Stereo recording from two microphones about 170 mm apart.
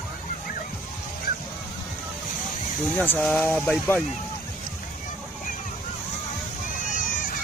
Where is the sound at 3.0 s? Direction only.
5° left (ahead or behind).